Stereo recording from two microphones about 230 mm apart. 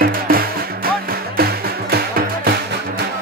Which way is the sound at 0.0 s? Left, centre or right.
Right.